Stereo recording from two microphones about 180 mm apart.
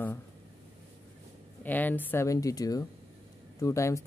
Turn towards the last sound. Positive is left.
turn(degrees=15)  # may be behind; listen again after turning